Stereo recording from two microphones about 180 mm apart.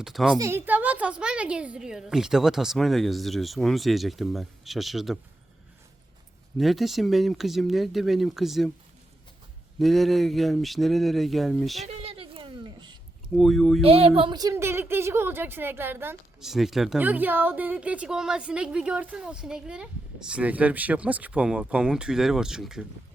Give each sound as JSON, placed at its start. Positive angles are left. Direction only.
{"t": 0.0, "sound": "a woman's voice", "side_deg": 0}
{"t": 0.3, "sound": "a woman's voice", "side_deg": -15}
{"t": 6.6, "sound": "a woman's voice", "side_deg": 0}
{"t": 9.7, "sound": "a woman's voice", "side_deg": 0}
{"t": 11.9, "sound": "a sound", "side_deg": -35}
{"t": 13.3, "sound": "a woman's voice", "side_deg": 0}
{"t": 13.8, "sound": "speech", "side_deg": -35}
{"t": 16.4, "sound": "a woman's voice", "side_deg": 0}